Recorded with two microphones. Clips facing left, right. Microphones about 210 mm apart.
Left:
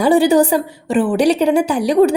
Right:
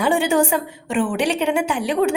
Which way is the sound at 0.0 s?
35° left (ahead or behind).